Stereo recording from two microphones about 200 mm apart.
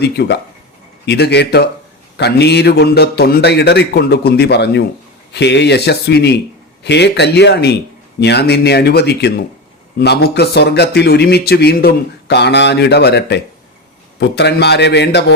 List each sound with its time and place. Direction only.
0.0 s speech: 55° left (ahead or behind)